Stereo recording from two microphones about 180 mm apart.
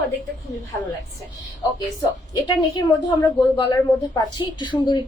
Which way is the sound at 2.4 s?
20° left (ahead or behind).